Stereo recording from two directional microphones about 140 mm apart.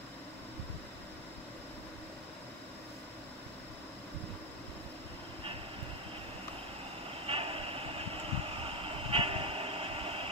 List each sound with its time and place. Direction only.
7.2 s vehicle: 40° right (ahead or behind)